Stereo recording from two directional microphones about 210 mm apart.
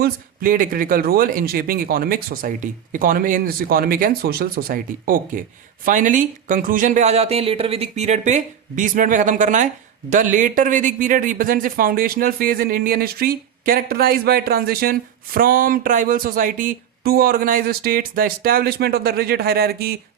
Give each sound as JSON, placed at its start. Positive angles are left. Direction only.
{"t": 0.0, "sound": "speech", "side_deg": -40}